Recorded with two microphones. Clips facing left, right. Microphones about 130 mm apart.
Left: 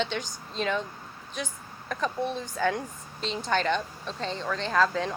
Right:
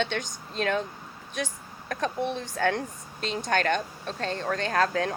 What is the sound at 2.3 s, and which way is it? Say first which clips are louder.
A woman's voice: right 1 dB; 65° right (ahead or behind).